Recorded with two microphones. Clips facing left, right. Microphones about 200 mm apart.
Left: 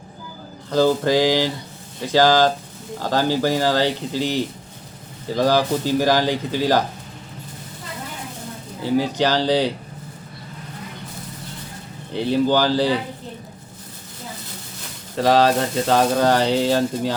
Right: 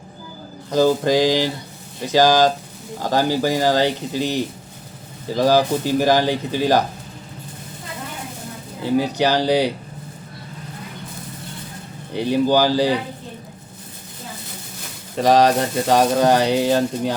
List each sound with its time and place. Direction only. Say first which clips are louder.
0.7 s speech: right 1 dB; 15° right (ahead or behind)
8.8 s speech: right 1 dB; 15° right (ahead or behind)
12.1 s speech: right 1 dB; 15° right (ahead or behind)
15.1 s speech: right 1 dB; 15° right (ahead or behind)